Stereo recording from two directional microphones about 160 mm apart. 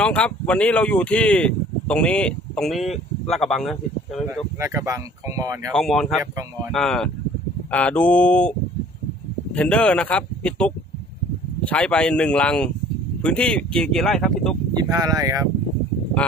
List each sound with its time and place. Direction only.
0.0 s speech: 5° left (ahead or behind)
4.3 s speech: 15° right (ahead or behind)
5.7 s speech: centre (ahead or behind)
9.6 s speech: 5° left (ahead or behind)
14.8 s speech: 25° right (ahead or behind)